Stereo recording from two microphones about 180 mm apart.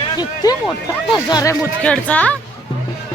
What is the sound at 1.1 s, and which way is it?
Speech, 20° left (ahead or behind).